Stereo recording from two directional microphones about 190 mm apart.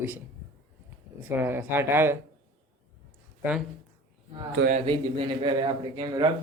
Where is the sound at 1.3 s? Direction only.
10° right (ahead or behind).